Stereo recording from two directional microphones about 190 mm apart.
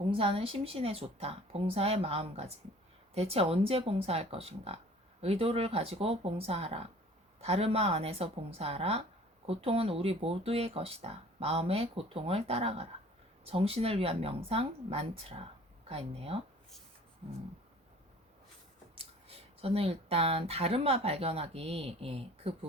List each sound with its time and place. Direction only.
0.1 s speech: 30° right (ahead or behind)
18.9 s speech: 30° right (ahead or behind)